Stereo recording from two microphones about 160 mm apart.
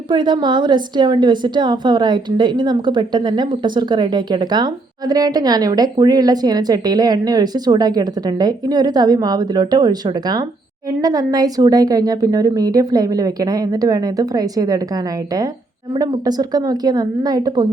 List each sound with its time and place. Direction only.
0.1 s a woman's voice: 30° right (ahead or behind)
16.0 s a woman's voice: 25° right (ahead or behind)